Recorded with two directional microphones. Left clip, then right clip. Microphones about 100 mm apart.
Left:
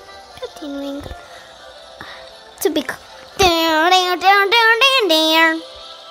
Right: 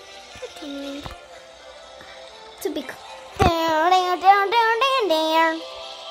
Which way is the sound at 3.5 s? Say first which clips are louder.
Left 4 dB; 90° left.